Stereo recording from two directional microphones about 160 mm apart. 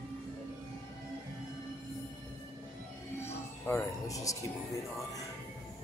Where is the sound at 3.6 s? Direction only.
15° left (ahead or behind).